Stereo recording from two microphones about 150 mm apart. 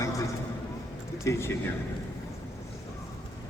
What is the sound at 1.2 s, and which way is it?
Speech, 20° left (ahead or behind).